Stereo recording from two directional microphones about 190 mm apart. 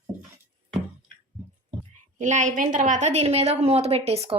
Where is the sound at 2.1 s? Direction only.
40° right (ahead or behind).